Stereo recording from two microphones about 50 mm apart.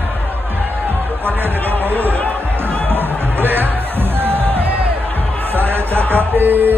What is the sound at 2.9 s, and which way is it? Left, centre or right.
Music, right.